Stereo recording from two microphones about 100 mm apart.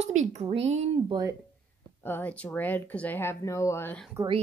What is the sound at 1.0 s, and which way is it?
Speech, 40° right (ahead or behind).